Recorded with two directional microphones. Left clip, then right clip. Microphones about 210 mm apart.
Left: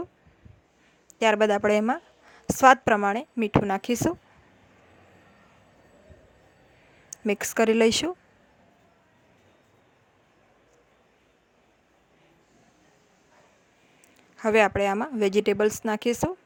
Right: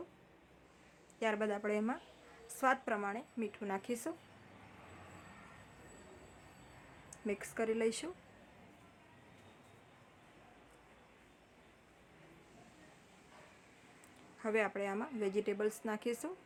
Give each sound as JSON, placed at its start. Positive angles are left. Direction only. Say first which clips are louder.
{"t": 1.2, "sound": "a woman's voice", "louder": "left 16 dB", "side_deg": 45}
{"t": 7.3, "sound": "a woman's voice", "louder": "left 15 dB", "side_deg": 45}
{"t": 14.3, "sound": "a woman's voice", "louder": "left 15 dB", "side_deg": 45}